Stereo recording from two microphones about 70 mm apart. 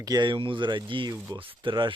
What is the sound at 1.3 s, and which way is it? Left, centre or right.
Speech, right.